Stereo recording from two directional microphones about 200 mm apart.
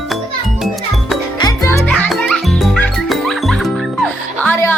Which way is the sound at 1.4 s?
20° left (ahead or behind).